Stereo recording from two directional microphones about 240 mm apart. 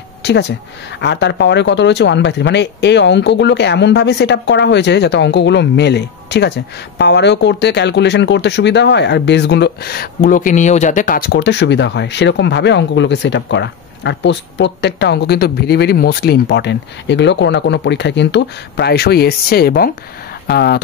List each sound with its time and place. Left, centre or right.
0.2 s speech: left